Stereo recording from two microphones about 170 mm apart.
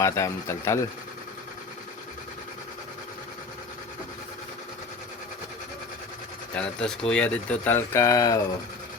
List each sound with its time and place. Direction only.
0.0 s speech: 15° left (ahead or behind)
6.5 s speech: 5° left (ahead or behind)